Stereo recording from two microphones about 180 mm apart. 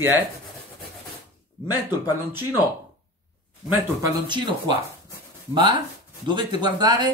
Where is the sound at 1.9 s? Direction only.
25° left (ahead or behind).